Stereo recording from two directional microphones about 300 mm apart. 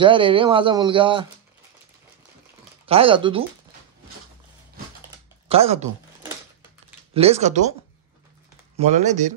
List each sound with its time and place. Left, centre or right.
0.0 s speech: centre
2.9 s speech: centre
5.5 s speech: right
7.2 s speech: right
8.7 s speech: right